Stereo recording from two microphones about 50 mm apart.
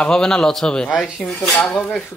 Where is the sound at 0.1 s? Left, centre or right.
Centre.